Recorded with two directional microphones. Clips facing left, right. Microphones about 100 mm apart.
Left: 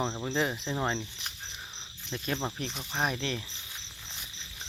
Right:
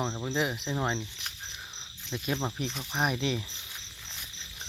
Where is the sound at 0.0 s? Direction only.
Centre (ahead or behind).